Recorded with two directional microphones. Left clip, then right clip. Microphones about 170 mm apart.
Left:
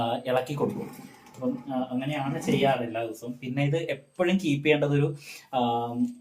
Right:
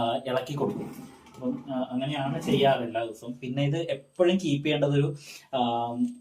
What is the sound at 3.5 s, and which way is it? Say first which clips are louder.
A man's voice: left 1 dB; 20° left (ahead or behind).